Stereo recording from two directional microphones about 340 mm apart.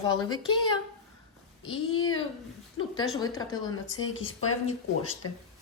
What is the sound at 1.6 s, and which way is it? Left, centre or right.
Speech, left.